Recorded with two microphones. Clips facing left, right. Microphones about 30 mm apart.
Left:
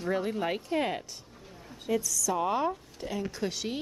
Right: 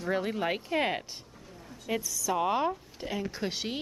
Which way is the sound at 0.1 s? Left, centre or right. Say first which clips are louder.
Even; centre.